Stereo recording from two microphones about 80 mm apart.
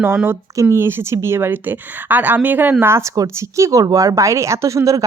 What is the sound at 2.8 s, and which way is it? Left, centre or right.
Speech, right.